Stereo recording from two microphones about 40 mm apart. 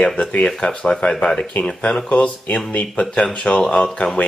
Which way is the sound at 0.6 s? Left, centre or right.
Left.